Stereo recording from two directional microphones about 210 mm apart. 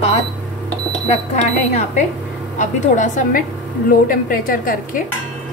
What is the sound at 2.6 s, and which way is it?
Speech, 35° left (ahead or behind).